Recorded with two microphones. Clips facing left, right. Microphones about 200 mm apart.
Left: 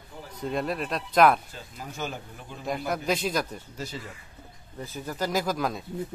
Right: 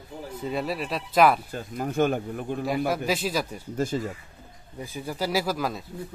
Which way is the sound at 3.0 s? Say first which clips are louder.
Even; 5° right (ahead or behind).